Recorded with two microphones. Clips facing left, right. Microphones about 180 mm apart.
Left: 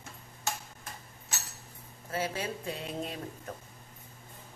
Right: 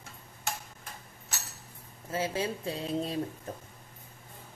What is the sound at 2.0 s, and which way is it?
Speech, 25° right (ahead or behind).